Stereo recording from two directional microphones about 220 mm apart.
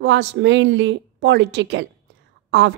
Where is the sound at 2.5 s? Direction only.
55° right (ahead or behind).